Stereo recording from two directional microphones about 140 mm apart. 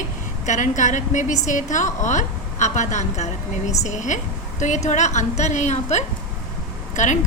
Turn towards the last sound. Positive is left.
turn(degrees=60)  # may be behind; listen again after turning